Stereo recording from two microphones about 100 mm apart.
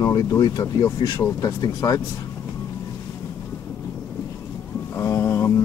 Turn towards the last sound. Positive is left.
turn(degrees=30)  # may be behind; listen again after turning